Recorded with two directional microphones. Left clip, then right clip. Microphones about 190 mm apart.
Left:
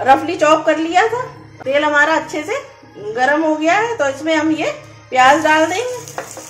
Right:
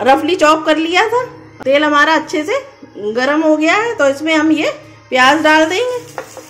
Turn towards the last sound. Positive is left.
turn(degrees=-55)  # may be behind; listen again after turning